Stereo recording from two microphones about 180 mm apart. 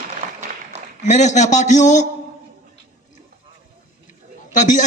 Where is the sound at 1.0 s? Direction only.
40° left (ahead or behind).